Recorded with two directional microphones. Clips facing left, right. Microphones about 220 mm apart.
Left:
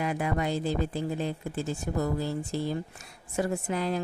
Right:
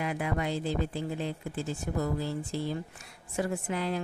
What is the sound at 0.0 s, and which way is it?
A woman's voice, 40° left (ahead or behind).